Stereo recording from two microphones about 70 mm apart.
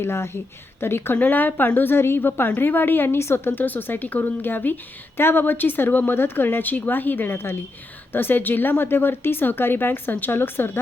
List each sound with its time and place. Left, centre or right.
0.0 s a woman's voice: left